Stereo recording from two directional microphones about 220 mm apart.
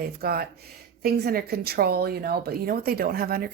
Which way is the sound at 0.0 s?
45° right (ahead or behind).